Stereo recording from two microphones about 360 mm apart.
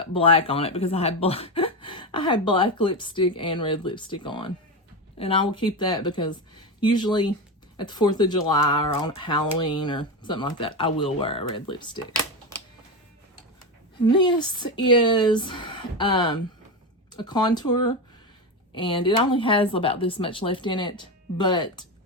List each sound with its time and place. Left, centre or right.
0.1 s speech: centre
14.1 s speech: centre